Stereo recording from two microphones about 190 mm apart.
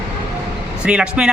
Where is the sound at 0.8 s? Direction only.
5° right (ahead or behind).